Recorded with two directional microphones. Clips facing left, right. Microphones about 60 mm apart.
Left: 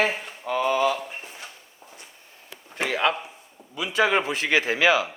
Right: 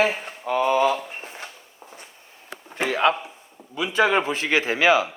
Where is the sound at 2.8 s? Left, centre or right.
Right.